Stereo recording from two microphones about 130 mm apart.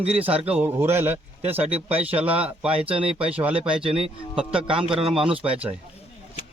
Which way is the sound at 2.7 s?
45° right (ahead or behind).